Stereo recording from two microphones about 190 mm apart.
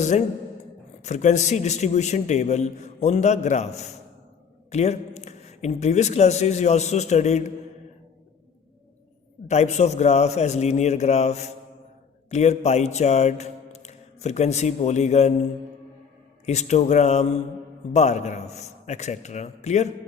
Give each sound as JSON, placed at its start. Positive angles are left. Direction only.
{"t": 0.0, "sound": "a man's voice", "side_deg": 40}
{"t": 9.5, "sound": "a man's voice", "side_deg": 35}
{"t": 16.5, "sound": "a man's voice", "side_deg": 35}